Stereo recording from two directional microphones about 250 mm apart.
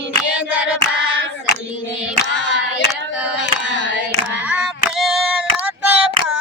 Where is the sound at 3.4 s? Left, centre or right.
Left.